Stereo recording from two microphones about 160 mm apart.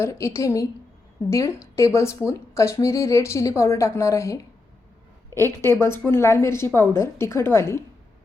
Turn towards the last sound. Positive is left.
turn(degrees=15)  # may be behind; listen again after turning